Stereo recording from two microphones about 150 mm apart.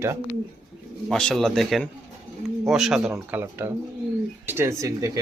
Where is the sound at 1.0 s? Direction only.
Centre (ahead or behind).